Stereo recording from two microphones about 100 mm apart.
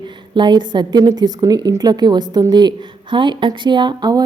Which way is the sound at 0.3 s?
50° right (ahead or behind).